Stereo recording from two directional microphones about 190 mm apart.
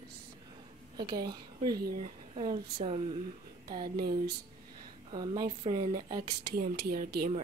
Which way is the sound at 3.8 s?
55° right (ahead or behind).